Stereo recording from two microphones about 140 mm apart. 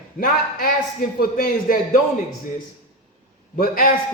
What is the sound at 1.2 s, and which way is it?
Speech, 90° left.